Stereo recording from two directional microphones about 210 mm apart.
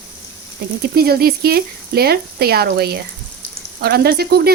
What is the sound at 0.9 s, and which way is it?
Speech, 45° right (ahead or behind).